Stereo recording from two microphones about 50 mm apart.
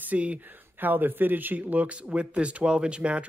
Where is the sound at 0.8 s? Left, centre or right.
Right.